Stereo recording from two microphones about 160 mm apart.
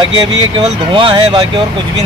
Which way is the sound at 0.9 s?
30° right (ahead or behind).